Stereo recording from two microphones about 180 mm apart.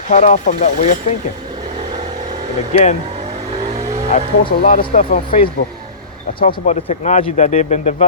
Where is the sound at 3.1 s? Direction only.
35° right (ahead or behind).